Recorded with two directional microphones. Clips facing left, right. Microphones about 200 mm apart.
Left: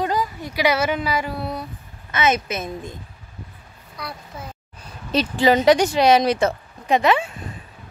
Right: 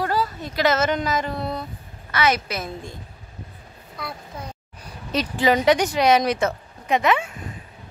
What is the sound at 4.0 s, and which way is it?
Speech, centre (ahead or behind).